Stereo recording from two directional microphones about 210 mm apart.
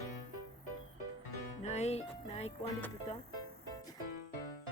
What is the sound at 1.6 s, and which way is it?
Music, 30° left (ahead or behind).